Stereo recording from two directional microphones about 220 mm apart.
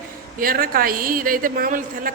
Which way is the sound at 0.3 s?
40° right (ahead or behind).